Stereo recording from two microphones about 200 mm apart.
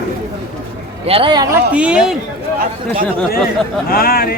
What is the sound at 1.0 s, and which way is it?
Speech, 25° right (ahead or behind).